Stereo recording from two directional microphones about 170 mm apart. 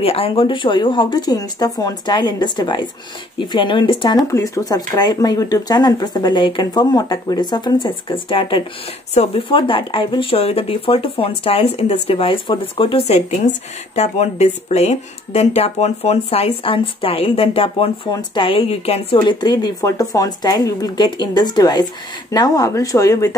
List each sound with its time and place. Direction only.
0.0 s speech: 35° left (ahead or behind)
19.1 s speech: 25° left (ahead or behind)